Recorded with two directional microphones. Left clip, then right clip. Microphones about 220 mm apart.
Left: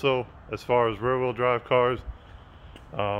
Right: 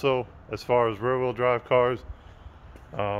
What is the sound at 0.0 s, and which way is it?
A man's voice, 5° right (ahead or behind).